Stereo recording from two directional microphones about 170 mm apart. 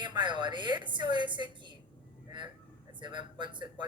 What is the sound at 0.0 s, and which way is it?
Speech, 25° right (ahead or behind).